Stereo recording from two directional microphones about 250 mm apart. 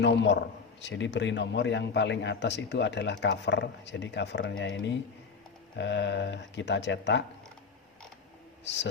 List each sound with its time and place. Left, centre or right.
0.0 s a man's voice: left